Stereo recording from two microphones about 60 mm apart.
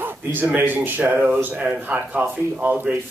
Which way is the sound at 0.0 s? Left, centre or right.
Right.